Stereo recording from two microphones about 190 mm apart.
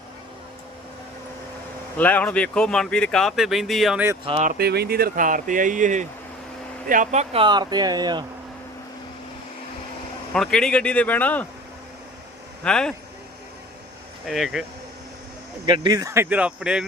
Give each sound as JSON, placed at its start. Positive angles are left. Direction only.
{"t": 2.0, "sound": "speech", "side_deg": 10}
{"t": 4.4, "sound": "speech", "side_deg": -55}
{"t": 7.4, "sound": "speech", "side_deg": -20}
{"t": 10.3, "sound": "speech", "side_deg": 5}
{"t": 12.6, "sound": "speech", "side_deg": 5}
{"t": 14.3, "sound": "speech", "side_deg": 0}
{"t": 15.6, "sound": "speech", "side_deg": -25}